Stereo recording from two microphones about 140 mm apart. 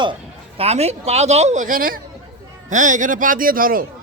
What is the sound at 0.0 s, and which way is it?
Speech, 40° right (ahead or behind).